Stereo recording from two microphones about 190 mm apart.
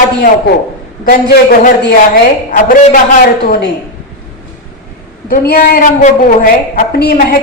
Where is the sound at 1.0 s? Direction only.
50° left (ahead or behind).